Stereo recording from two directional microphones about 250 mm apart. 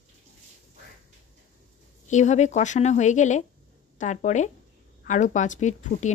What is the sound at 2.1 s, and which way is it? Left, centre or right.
Speech, left.